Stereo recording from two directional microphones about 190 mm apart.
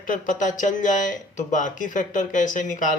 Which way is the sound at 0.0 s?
45° left (ahead or behind).